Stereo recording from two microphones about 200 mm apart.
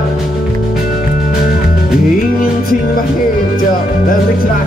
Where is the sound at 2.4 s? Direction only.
45° left (ahead or behind).